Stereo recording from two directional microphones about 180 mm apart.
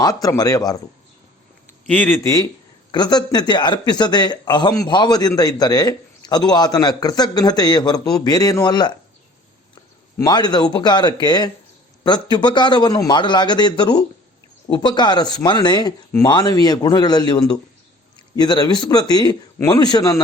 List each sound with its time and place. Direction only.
0.0 s speech: 20° left (ahead or behind)
1.9 s speech: 10° left (ahead or behind)
10.2 s speech: 20° left (ahead or behind)